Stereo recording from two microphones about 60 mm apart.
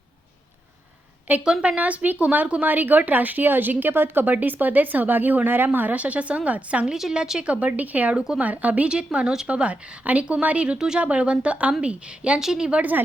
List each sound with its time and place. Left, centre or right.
1.3 s a woman's voice: right
6.8 s a woman's voice: centre